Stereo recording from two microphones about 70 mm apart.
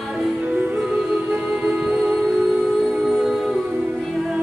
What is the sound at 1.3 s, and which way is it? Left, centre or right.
Music, right.